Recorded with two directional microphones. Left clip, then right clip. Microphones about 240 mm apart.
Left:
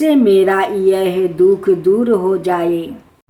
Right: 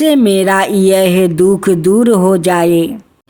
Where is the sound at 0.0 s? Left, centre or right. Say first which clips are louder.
Right 1 dB; right.